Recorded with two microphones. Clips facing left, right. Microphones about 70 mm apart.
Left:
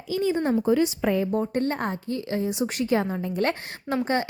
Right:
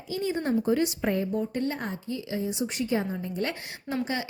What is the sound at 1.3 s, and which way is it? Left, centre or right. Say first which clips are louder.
A woman's voice: left 4 dB; left.